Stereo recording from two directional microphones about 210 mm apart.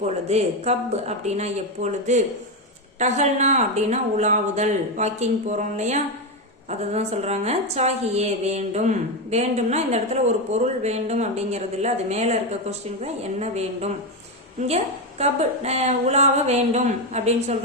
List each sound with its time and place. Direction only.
0.3 s a woman's voice: 30° right (ahead or behind)